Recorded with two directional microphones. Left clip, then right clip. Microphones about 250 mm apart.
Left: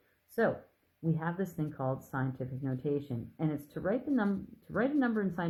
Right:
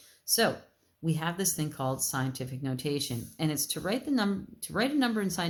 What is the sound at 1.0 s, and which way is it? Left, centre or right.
Speech, right.